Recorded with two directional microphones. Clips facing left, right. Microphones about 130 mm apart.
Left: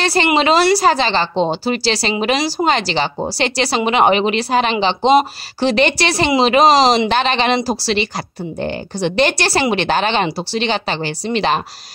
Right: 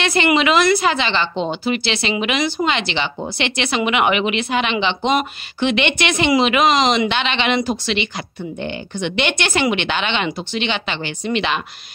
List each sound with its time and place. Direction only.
0.0 s a woman's voice: 35° left (ahead or behind)